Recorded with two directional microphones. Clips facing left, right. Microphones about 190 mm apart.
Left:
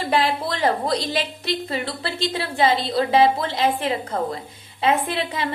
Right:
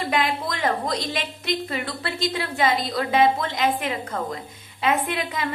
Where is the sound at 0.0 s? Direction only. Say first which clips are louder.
Left 3 dB; 30° left (ahead or behind).